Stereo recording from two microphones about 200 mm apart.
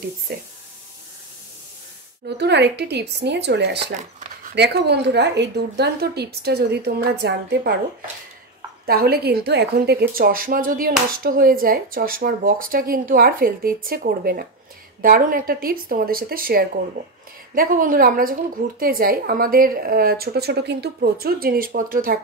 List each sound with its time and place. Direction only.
0.3 s a woman's voice: 50° right (ahead or behind)
2.2 s a woman's voice: 60° right (ahead or behind)
3.9 s a sound: 35° right (ahead or behind)
4.6 s a woman's voice: 55° right (ahead or behind)
8.8 s a woman's voice: 50° right (ahead or behind)